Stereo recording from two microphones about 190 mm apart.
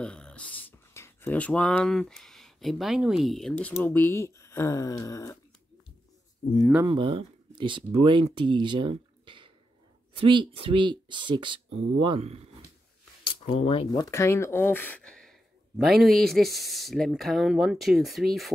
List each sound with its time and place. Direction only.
0.0 s speech: 5° left (ahead or behind)
6.8 s speech: 25° right (ahead or behind)
13.2 s speech: 30° left (ahead or behind); by 18.5 s centre (ahead or behind)